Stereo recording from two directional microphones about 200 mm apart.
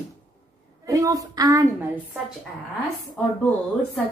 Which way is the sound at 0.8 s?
15° right (ahead or behind).